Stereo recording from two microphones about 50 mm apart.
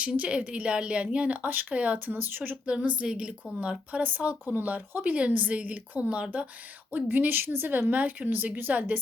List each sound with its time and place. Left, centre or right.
0.0 s speech: right
2.6 s a woman's voice: right
6.9 s a woman's voice: right